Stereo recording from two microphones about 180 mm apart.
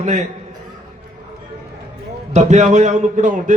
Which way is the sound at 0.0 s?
40° right (ahead or behind).